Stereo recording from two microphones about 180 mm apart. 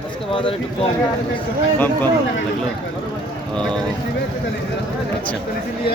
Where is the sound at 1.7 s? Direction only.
10° left (ahead or behind).